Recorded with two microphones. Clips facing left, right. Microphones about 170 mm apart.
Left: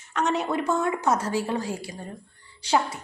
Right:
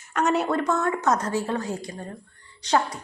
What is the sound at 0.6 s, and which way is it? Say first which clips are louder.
A woman's voice: right 1 dB; 10° left (ahead or behind).